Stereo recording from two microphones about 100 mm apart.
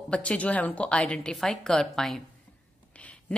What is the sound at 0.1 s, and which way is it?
A woman's voice, 10° left (ahead or behind).